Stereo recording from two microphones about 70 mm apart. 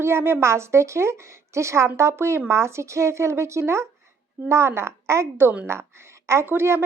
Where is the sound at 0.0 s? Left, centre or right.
Right.